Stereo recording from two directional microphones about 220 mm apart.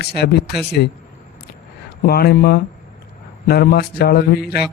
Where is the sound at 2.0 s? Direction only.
45° left (ahead or behind).